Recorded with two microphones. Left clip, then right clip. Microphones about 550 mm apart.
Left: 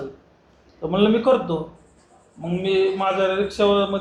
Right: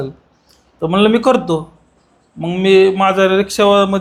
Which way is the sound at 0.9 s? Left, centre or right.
Right.